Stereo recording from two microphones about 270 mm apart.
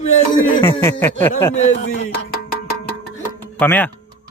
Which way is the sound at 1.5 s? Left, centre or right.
Left.